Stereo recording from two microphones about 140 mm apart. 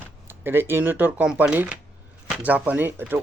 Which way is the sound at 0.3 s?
15° right (ahead or behind).